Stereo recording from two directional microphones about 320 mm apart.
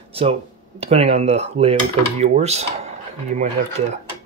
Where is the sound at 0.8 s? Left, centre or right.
Centre.